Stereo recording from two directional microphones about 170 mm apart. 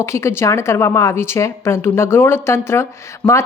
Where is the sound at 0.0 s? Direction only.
15° left (ahead or behind).